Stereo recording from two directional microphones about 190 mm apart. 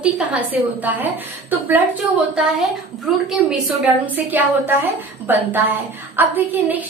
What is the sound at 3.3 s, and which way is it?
A woman's voice, 5° right (ahead or behind).